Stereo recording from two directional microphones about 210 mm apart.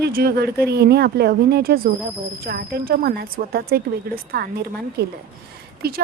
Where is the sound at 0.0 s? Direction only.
45° right (ahead or behind).